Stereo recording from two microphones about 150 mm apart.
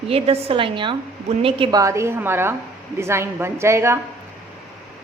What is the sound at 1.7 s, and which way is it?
A woman's voice, 20° right (ahead or behind).